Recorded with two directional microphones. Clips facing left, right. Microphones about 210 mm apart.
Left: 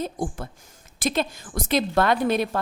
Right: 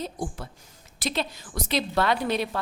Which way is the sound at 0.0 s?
50° left (ahead or behind).